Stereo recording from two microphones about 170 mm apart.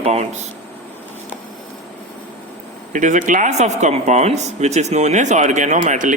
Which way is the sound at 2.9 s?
50° right (ahead or behind).